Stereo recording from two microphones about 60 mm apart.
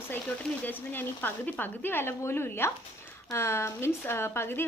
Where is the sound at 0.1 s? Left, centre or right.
Left.